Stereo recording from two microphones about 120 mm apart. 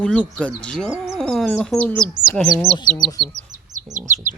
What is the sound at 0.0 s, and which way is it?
Speech, 10° left (ahead or behind).